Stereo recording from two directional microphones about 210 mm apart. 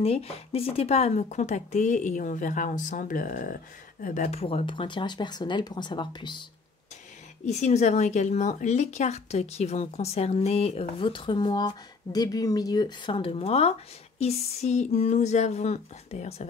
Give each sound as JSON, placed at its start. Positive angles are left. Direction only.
{"t": 0.0, "sound": "speech", "side_deg": 30}
{"t": 7.4, "sound": "speech", "side_deg": 35}